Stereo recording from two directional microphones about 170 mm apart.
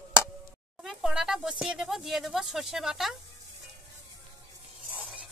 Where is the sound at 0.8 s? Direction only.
Centre (ahead or behind).